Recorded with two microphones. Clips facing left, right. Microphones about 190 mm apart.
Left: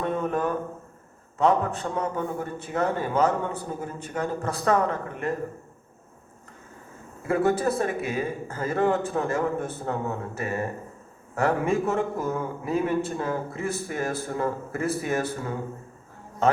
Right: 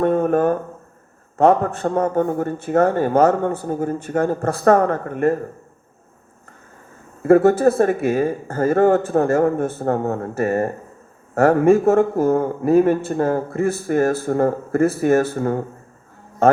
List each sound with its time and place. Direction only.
0.0 s a man's voice: 55° right (ahead or behind)
7.2 s a man's voice: 55° right (ahead or behind)